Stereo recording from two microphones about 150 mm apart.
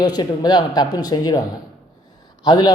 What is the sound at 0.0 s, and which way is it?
Speech, 25° left (ahead or behind).